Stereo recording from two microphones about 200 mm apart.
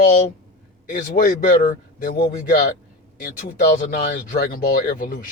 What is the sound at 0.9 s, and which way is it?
Speech, 40° left (ahead or behind).